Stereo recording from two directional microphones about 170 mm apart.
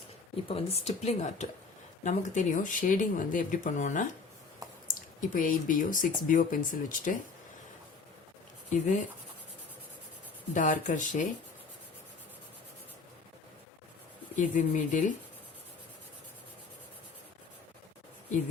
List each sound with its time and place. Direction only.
0.4 s speech: 35° left (ahead or behind); by 7.2 s 50° left (ahead or behind)
8.7 s speech: 45° left (ahead or behind)
10.5 s speech: 45° left (ahead or behind)
14.3 s speech: 50° left (ahead or behind)